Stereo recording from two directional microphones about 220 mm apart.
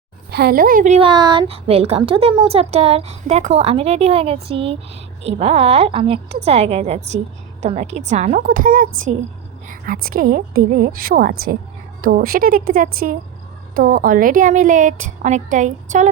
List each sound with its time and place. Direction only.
0.3 s a woman's voice: 45° right (ahead or behind)